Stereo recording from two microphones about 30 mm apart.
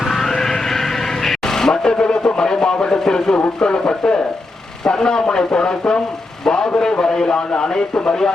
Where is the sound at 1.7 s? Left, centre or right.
Left.